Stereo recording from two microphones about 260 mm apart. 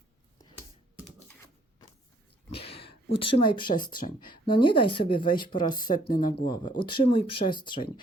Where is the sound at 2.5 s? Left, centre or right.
Left.